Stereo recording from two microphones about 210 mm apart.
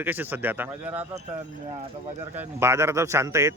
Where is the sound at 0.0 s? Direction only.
10° right (ahead or behind).